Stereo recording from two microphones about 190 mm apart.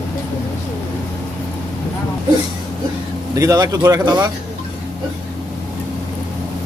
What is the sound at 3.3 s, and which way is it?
Speech, 15° right (ahead or behind).